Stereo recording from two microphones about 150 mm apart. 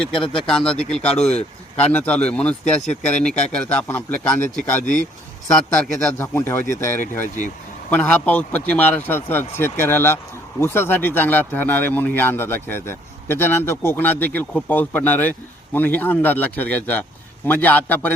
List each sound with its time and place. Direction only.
0.1 s speech: 35° left (ahead or behind)
0.4 s speech: 5° left (ahead or behind)
1.3 s speech: 45° left (ahead or behind)
1.9 s speech: 10° left (ahead or behind)
4.8 s speech: 60° left (ahead or behind)
6.1 s speech: 15° left (ahead or behind)